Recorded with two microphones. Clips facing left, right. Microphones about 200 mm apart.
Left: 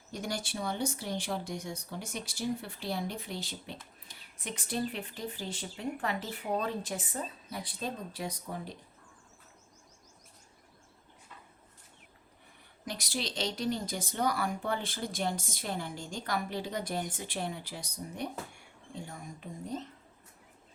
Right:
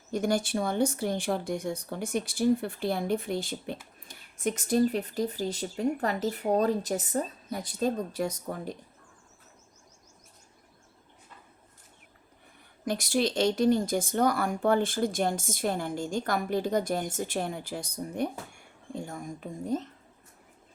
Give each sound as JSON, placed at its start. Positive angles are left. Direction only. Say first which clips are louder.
{"t": 0.1, "sound": "speech", "louder": "right 10 dB", "side_deg": -50}
{"t": 12.8, "sound": "speech", "louder": "right 10 dB", "side_deg": -50}